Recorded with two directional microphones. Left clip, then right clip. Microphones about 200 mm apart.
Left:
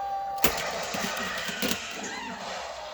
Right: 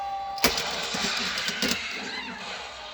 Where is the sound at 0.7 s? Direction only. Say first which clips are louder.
Right 3 dB; 35° left (ahead or behind).